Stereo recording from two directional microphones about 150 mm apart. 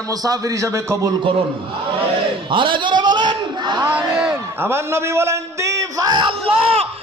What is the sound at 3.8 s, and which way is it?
A man's voice, 10° right (ahead or behind).